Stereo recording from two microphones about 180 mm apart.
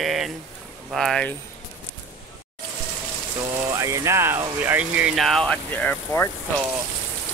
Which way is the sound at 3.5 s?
15° right (ahead or behind).